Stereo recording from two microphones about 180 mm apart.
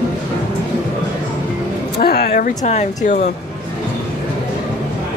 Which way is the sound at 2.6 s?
40° left (ahead or behind).